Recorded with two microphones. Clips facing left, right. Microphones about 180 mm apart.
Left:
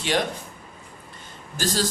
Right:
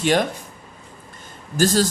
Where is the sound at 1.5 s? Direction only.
50° right (ahead or behind).